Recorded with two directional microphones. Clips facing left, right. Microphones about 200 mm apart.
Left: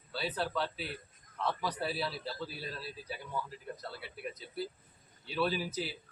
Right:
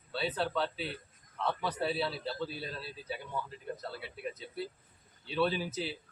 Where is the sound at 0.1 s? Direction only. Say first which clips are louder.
Right 3 dB; 25° right (ahead or behind).